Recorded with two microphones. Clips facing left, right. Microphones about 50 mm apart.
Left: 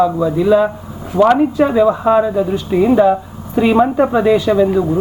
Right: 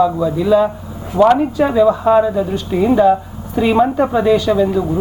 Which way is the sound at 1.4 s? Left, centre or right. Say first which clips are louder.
Left 1 dB; centre.